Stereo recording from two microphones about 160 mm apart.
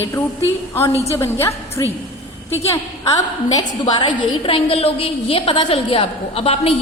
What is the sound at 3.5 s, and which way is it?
A woman's voice, 25° left (ahead or behind).